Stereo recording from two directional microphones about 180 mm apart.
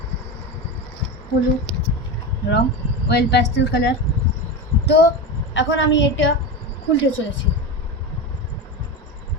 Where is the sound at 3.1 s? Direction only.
65° left (ahead or behind).